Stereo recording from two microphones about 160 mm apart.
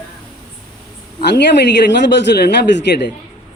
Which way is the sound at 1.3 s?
90° left.